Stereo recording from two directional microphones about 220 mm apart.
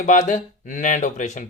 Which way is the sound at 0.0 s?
35° left (ahead or behind).